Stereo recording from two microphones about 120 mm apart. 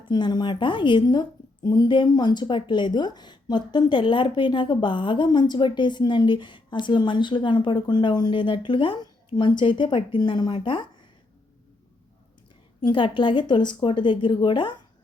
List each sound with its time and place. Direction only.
0.0 s a woman's voice: 35° left (ahead or behind)
12.8 s a woman's voice: 40° left (ahead or behind)